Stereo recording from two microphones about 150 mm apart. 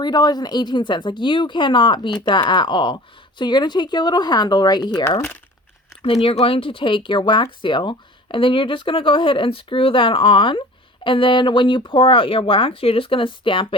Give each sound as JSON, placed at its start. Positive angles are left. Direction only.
{"t": 0.0, "sound": "speech", "side_deg": 30}
{"t": 6.2, "sound": "speech", "side_deg": 40}